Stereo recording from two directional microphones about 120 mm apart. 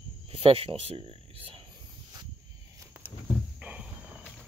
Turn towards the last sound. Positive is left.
turn(degrees=-10)  # may be behind; listen again after turning